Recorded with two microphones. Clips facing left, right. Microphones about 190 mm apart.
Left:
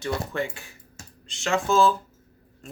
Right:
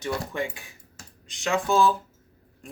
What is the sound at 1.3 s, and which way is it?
Speech, 15° right (ahead or behind).